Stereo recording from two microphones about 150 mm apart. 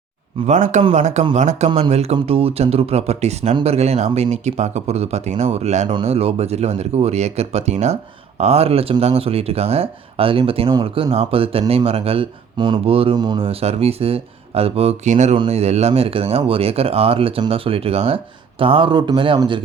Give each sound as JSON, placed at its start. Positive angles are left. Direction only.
{"t": 0.4, "sound": "speech", "side_deg": -50}